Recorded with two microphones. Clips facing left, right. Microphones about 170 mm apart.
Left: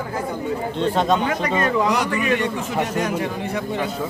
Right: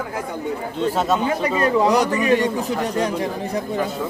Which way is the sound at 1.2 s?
30° right (ahead or behind).